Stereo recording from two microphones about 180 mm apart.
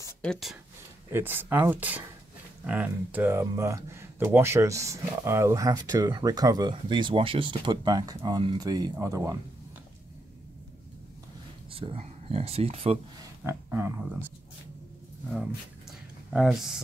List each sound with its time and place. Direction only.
0.2 s speech: centre (ahead or behind)
1.1 s speech: 10° right (ahead or behind)
11.7 s speech: 30° right (ahead or behind)
13.4 s speech: 10° right (ahead or behind)
16.3 s speech: centre (ahead or behind)